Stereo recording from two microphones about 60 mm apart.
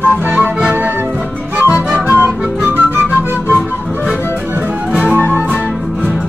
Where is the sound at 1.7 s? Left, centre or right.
Right.